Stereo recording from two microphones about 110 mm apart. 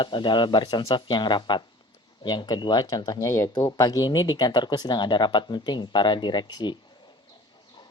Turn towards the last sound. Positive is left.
turn(degrees=40)  # may be behind; listen again after turning